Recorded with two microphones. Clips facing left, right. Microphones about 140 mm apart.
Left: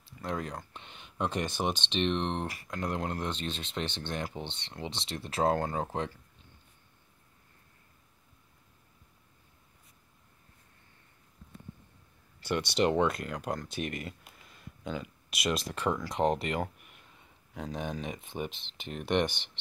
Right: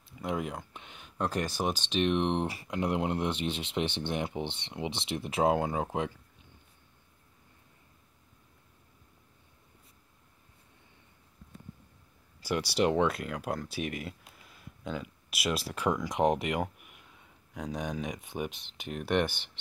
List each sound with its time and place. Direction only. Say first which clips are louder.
0.3 s speech: right 2 dB; 10° right (ahead or behind)
2.4 s speech: right 3 dB; 30° right (ahead or behind)
2.7 s speech: right 4 dB; 15° right (ahead or behind)
12.4 s speech: even; 5° right (ahead or behind)